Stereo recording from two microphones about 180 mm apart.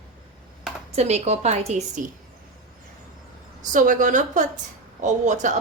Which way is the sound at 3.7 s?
45° right (ahead or behind).